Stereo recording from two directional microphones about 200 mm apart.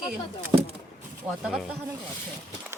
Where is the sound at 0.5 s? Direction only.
20° right (ahead or behind).